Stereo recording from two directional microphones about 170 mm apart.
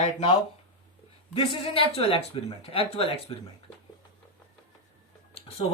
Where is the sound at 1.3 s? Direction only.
30° left (ahead or behind).